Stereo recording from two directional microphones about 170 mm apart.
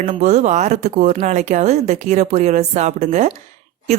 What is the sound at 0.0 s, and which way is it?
Speech, 45° right (ahead or behind).